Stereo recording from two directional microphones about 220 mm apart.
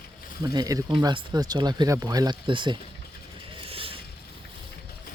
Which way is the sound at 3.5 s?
25° right (ahead or behind).